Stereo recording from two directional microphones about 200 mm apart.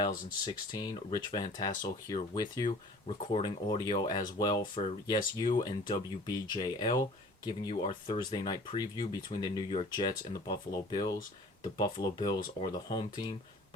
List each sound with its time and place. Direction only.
0.7 s speech: 20° left (ahead or behind)
5.5 s speech: 45° left (ahead or behind)
5.9 s speech: 20° left (ahead or behind)